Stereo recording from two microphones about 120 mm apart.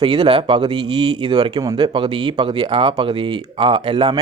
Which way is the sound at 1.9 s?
40° right (ahead or behind).